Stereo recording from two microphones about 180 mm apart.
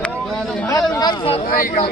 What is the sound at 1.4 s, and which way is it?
Speech, 50° left (ahead or behind).